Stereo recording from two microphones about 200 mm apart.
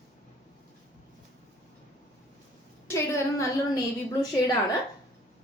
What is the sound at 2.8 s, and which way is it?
Speech, 15° left (ahead or behind).